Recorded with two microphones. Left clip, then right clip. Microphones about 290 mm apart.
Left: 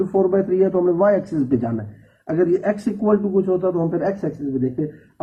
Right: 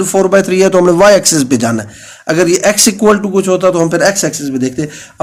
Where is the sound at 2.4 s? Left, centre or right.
Right.